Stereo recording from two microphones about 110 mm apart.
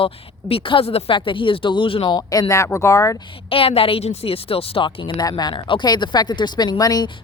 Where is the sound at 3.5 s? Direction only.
60° left (ahead or behind); by 7.1 s 35° left (ahead or behind).